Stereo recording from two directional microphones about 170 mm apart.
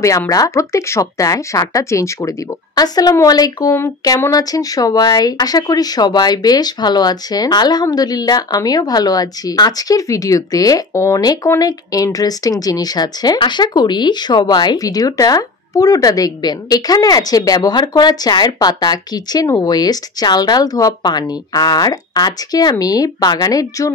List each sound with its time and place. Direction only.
0.0 s speech: 20° left (ahead or behind)